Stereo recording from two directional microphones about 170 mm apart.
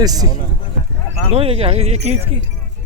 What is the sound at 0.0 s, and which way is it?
Speech, 20° right (ahead or behind).